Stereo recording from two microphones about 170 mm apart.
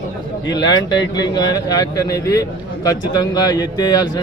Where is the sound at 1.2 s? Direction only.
25° left (ahead or behind).